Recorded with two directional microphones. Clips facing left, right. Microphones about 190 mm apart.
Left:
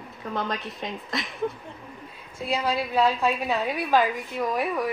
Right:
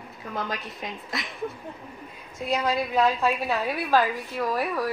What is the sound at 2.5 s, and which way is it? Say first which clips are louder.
A woman's voice: right 1 dB; 10° left (ahead or behind).